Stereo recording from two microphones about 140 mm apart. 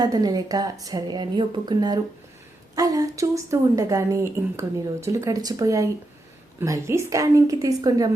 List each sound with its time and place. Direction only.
0.0 s speech: 25° right (ahead or behind)